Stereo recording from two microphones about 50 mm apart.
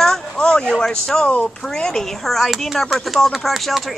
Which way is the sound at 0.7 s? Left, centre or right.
Centre.